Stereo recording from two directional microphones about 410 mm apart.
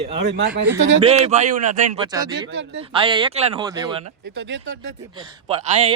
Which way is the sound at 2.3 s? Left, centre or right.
Right.